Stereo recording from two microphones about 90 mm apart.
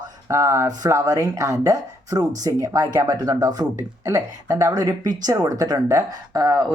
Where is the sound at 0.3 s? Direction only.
35° right (ahead or behind).